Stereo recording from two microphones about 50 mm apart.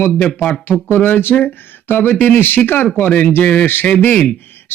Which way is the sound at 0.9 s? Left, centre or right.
Left.